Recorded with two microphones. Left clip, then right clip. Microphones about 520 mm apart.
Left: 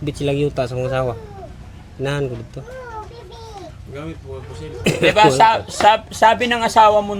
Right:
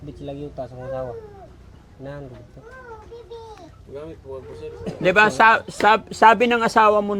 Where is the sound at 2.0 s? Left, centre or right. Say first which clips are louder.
Left 13 dB; left.